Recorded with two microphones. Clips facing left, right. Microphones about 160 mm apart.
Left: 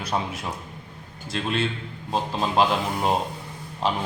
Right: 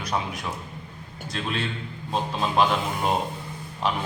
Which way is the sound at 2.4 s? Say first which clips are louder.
Left 1 dB; 30° left (ahead or behind).